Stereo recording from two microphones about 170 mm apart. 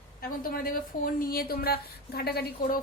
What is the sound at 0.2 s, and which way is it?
A woman's voice, 60° left (ahead or behind).